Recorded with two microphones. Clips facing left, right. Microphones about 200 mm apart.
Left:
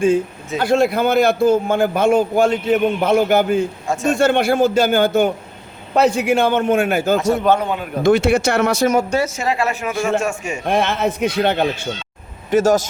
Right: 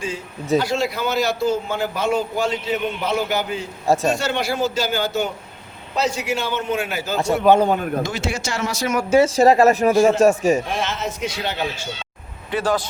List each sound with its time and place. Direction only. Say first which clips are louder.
0.6 s a man's voice: left 7 dB; 55° left (ahead or behind)
3.8 s speech: right 2 dB; 35° right (ahead or behind)
4.1 s a man's voice: left 7 dB; 55° left (ahead or behind)
7.6 s speech: right 4 dB; 40° right (ahead or behind)
8.0 s a man's voice: left 12 dB; 60° left (ahead or behind)
9.2 s speech: right 7 dB; 35° right (ahead or behind)
10.7 s a man's voice: left 7 dB; 60° left (ahead or behind)
12.5 s a man's voice: left 7 dB; 45° left (ahead or behind)